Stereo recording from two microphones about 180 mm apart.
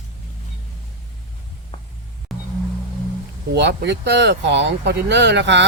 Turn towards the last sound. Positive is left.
turn(degrees=-75)  # may be behind; listen again after turning